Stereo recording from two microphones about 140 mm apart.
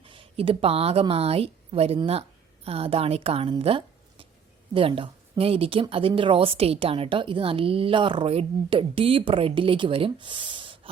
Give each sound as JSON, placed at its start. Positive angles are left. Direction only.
{"t": 0.0, "sound": "a woman's voice", "side_deg": -40}